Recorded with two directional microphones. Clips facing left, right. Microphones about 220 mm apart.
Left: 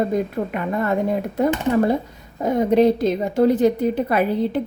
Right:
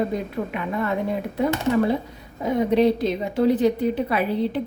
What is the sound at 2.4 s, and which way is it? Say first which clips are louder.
A woman's voice: left 3 dB; 45° left (ahead or behind).